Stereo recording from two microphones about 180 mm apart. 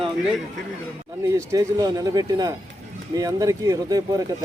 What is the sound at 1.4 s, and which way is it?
Speech, 20° right (ahead or behind).